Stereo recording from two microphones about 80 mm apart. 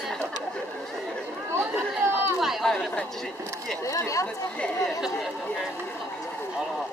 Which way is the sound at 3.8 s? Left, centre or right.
Left.